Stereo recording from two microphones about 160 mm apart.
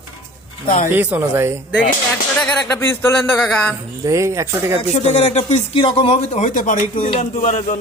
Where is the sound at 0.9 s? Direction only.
10° right (ahead or behind).